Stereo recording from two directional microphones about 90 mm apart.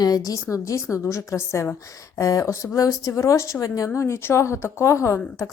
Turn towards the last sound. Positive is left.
turn(degrees=35)  # may be behind; listen again after turning